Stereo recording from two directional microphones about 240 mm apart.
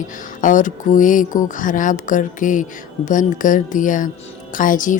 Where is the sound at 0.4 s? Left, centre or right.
Left.